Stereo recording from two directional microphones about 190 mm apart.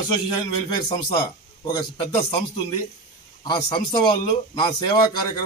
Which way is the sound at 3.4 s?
25° left (ahead or behind).